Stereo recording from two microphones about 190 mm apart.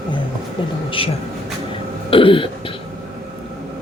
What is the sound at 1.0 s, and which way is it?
Speech, 30° left (ahead or behind).